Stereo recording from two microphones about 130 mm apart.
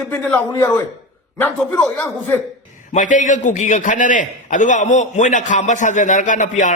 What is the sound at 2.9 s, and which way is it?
A man's voice, 75° left (ahead or behind).